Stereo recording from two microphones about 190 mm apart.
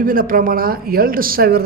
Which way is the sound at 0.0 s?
50° right (ahead or behind).